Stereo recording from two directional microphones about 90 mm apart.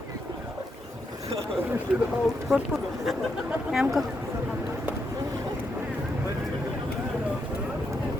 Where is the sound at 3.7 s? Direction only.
5° right (ahead or behind).